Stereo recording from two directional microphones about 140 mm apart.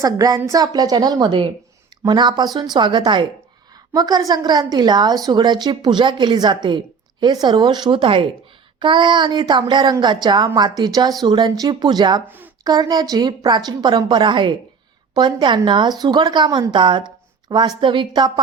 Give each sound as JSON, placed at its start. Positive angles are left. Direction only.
{"t": 0.0, "sound": "a woman's voice", "side_deg": -25}